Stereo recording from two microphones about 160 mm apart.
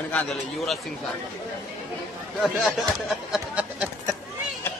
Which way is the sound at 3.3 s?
5° right (ahead or behind).